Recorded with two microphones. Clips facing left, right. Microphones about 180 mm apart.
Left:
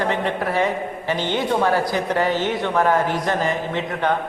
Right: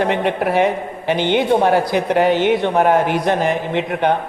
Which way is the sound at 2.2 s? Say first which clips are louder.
Right 7 dB; 65° right (ahead or behind).